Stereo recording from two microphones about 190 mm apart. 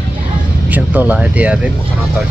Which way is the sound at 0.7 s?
10° right (ahead or behind).